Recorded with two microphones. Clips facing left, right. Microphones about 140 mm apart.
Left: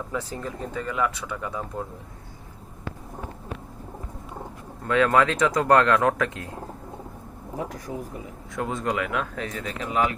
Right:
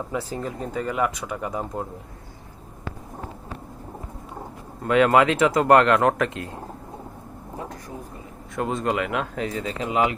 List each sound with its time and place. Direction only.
0.2 s speech: 35° right (ahead or behind)
0.7 s speech: 15° right (ahead or behind)
1.1 s speech: 35° right (ahead or behind)
4.9 s speech: 10° right (ahead or behind)
8.5 s speech: centre (ahead or behind)
9.2 s speech: 25° right (ahead or behind)
9.8 s speech: 15° right (ahead or behind)